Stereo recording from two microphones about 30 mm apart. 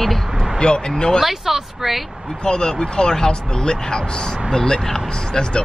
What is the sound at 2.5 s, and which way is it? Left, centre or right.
Speech, left.